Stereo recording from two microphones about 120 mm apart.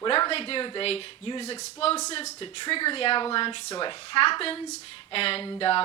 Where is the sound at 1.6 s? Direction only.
55° left (ahead or behind).